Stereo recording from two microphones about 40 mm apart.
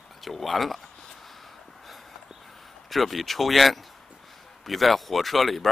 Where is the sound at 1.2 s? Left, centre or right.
Centre.